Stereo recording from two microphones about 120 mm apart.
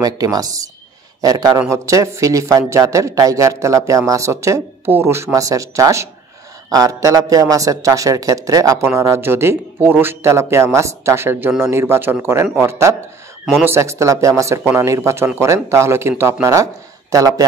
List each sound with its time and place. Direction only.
0.0 s a man's voice: 30° right (ahead or behind)